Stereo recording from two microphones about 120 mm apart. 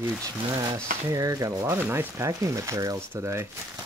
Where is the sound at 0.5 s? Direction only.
30° right (ahead or behind).